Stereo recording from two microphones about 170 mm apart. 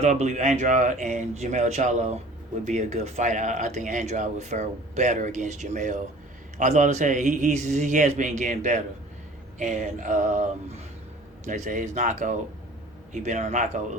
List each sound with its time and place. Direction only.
0.0 s speech: 40° right (ahead or behind)